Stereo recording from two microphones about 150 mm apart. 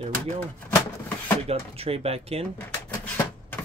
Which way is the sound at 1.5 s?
40° right (ahead or behind).